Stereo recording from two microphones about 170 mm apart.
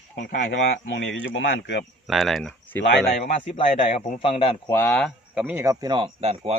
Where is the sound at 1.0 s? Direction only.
90° left.